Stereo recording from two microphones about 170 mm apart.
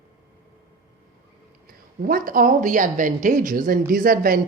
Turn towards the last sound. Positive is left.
turn(degrees=-55)  # may be behind; listen again after turning